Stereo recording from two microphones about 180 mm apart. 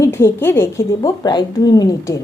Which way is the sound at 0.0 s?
15° left (ahead or behind).